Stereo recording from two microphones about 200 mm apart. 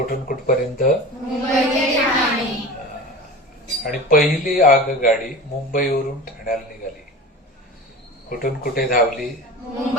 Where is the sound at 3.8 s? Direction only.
45° left (ahead or behind).